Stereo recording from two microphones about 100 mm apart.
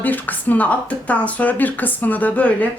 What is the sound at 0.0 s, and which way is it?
A woman's voice, 15° left (ahead or behind).